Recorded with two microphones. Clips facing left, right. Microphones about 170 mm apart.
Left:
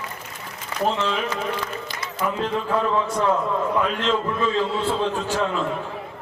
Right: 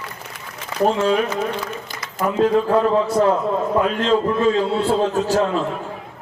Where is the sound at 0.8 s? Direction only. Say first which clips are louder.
Right 6 dB; 45° right (ahead or behind).